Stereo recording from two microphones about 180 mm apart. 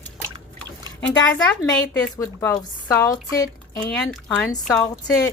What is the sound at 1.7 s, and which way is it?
A woman's voice, 15° left (ahead or behind).